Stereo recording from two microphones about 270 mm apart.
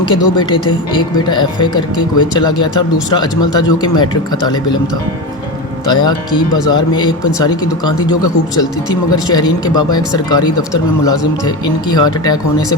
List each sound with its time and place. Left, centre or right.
0.0 s speech: centre
5.9 s speech: centre
9.1 s speech: centre